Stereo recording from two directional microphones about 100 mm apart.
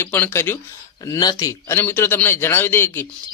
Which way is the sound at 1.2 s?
40° left (ahead or behind).